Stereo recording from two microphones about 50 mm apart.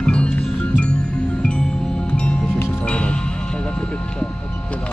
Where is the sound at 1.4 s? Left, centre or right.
Centre.